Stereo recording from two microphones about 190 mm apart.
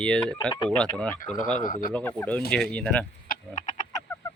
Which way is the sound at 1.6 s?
45° left (ahead or behind).